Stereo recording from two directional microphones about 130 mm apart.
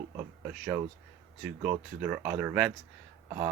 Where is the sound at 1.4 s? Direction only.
10° right (ahead or behind).